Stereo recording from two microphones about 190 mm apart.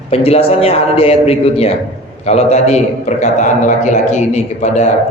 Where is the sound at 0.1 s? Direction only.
30° left (ahead or behind).